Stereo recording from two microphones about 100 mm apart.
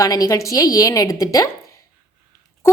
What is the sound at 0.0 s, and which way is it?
A woman's voice, 40° left (ahead or behind).